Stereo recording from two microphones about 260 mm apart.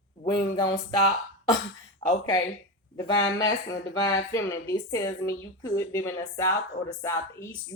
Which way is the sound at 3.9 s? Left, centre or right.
Centre.